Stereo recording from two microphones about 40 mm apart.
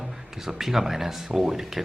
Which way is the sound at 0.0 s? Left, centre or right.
Centre.